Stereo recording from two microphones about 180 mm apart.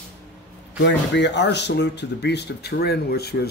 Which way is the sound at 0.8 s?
75° left (ahead or behind).